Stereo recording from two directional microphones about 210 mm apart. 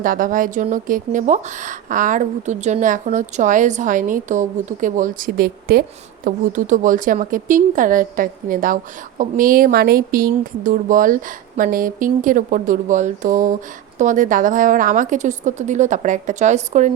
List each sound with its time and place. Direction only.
0.0 s speech: 40° right (ahead or behind)